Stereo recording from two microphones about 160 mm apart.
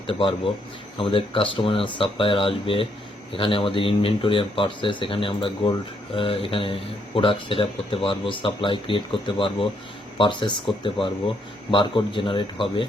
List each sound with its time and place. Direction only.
0.1 s speech: 30° left (ahead or behind)